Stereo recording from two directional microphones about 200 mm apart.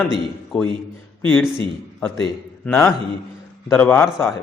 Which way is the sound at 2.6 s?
10° left (ahead or behind).